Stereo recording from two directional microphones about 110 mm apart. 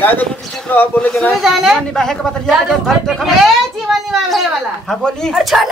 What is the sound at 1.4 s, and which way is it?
Speech, centre (ahead or behind).